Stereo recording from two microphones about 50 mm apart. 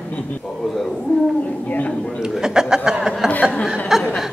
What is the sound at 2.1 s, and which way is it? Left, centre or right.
Chuckle, centre.